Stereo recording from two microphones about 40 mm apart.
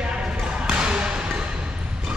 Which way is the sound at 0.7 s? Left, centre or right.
Right.